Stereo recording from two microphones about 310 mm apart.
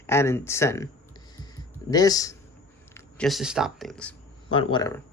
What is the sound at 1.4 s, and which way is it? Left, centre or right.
Music, centre.